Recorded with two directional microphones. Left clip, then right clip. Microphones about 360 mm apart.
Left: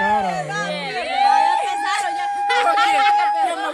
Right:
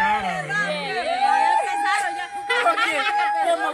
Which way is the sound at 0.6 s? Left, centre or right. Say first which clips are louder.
Even; centre.